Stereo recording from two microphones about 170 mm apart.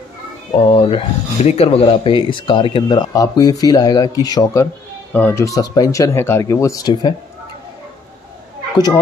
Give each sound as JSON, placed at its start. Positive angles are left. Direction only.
{"t": 0.7, "sound": "speech", "side_deg": 30}